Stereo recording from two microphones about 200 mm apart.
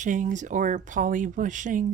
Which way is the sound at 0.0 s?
40° right (ahead or behind).